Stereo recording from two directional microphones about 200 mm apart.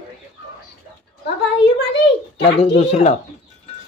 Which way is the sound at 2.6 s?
30° left (ahead or behind).